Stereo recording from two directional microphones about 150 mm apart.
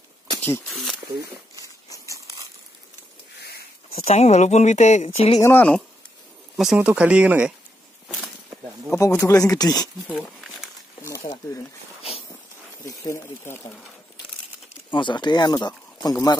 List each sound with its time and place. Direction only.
0.7 s speech: centre (ahead or behind)
1.6 s a sound: 20° right (ahead or behind)
3.9 s speech: 45° left (ahead or behind)
5.4 s speech: 15° left (ahead or behind)
6.5 s speech: 5° right (ahead or behind)
8.9 s speech: 20° left (ahead or behind)
10.1 s crumpling: 5° right (ahead or behind)
11.0 s snake: 20° left (ahead or behind)
12.8 s speech: 20° left (ahead or behind)
14.9 s speech: 30° left (ahead or behind)